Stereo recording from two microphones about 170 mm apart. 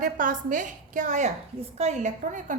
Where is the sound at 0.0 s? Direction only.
50° right (ahead or behind).